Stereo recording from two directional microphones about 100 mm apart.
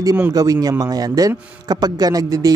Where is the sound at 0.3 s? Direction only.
35° right (ahead or behind).